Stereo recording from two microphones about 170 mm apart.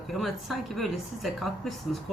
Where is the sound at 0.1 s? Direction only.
Centre (ahead or behind).